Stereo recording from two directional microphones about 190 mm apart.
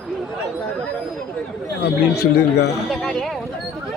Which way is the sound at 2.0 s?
60° left (ahead or behind).